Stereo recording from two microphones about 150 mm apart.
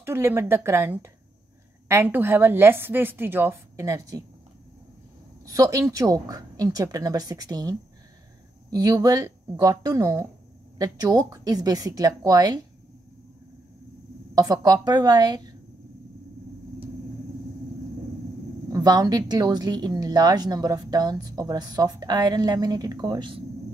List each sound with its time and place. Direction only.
0.0 s a woman's voice: 15° right (ahead or behind)
5.4 s a woman's voice: 20° right (ahead or behind)
14.3 s a woman's voice: 25° right (ahead or behind)
18.7 s a woman's voice: 25° right (ahead or behind)